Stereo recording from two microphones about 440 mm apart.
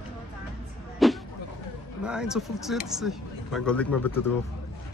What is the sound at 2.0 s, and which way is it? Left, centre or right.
Speech, centre.